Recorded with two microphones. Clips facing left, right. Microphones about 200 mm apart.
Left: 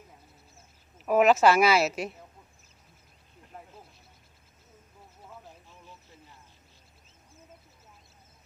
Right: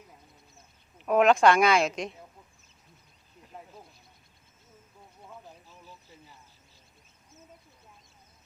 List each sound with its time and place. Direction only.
0.9 s speech: 5° left (ahead or behind)